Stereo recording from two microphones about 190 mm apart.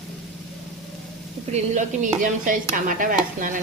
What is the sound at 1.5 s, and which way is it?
Speech, 40° right (ahead or behind).